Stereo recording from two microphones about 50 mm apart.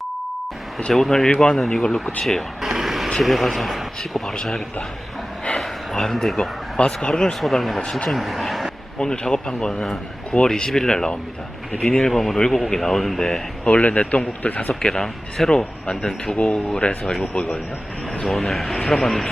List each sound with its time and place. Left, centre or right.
0.9 s speech: centre
2.6 s vehicle: centre
3.2 s speech: centre
5.5 s a sound: centre
6.7 s speech: centre
7.4 s speech: centre
9.0 s speech: centre
13.7 s a man's voice: left
14.8 s speech: centre
16.3 s speech: left
18.3 s speech: centre